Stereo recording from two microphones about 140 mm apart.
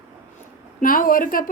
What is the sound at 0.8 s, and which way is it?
Speech, 75° left (ahead or behind).